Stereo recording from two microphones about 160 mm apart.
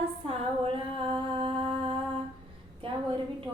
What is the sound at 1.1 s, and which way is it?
Humming, 35° right (ahead or behind).